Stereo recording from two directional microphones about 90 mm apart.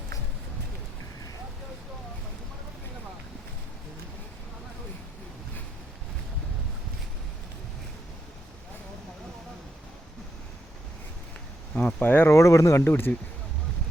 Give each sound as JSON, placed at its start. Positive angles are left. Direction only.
{"t": 11.7, "sound": "speech", "side_deg": 15}
{"t": 12.8, "sound": "speech", "side_deg": 20}